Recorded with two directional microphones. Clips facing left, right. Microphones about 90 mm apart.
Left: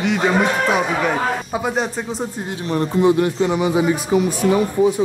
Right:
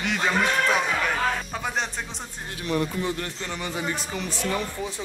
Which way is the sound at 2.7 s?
35° left (ahead or behind).